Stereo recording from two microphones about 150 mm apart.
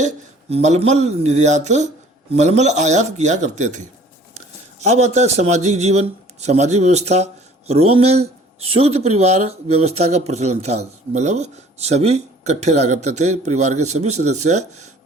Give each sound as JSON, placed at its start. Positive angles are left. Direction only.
{"t": 0.5, "sound": "a man's voice", "side_deg": -45}